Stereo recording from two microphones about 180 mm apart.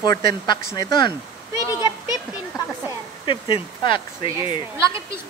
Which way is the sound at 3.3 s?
30° left (ahead or behind).